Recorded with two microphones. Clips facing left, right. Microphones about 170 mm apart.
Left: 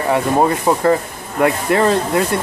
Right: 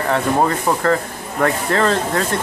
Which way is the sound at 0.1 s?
15° left (ahead or behind).